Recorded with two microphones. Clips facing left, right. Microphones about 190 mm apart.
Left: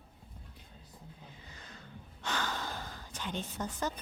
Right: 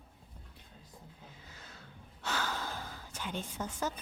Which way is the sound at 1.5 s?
5° right (ahead or behind).